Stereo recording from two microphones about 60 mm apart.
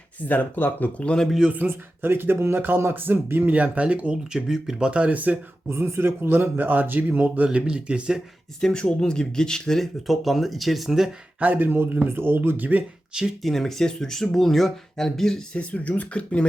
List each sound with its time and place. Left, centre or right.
0.3 s speech: left
1.0 s speech: centre
1.5 s a man's voice: right
3.5 s speech: right
4.4 s speech: centre
4.9 s speech: right
5.6 s a man's voice: right; by 8.2 s centre
8.6 s speech: centre
11.3 s a man's voice: right
13.4 s speech: centre
15.5 s speech: left